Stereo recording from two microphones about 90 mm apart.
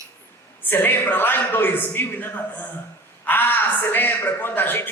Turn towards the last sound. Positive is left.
turn(degrees=20)  # may be behind; listen again after turning